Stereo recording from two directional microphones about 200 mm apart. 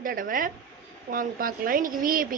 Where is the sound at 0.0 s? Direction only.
45° right (ahead or behind).